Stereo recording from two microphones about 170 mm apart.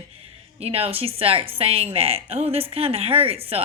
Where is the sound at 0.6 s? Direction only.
35° right (ahead or behind).